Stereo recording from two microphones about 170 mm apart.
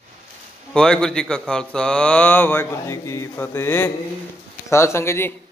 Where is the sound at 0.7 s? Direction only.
5° left (ahead or behind).